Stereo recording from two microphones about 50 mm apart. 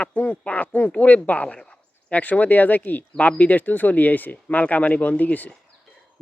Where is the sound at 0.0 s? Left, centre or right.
Left.